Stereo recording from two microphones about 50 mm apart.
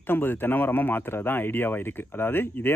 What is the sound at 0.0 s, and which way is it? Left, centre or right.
Speech, left.